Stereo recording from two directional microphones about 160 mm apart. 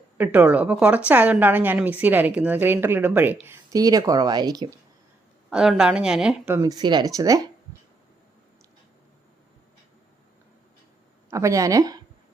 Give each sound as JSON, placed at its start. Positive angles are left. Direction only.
{"t": 0.2, "sound": "a woman's voice", "side_deg": -10}
{"t": 5.5, "sound": "a woman's voice", "side_deg": -5}
{"t": 6.6, "sound": "speech", "side_deg": -25}
{"t": 11.3, "sound": "speech", "side_deg": -20}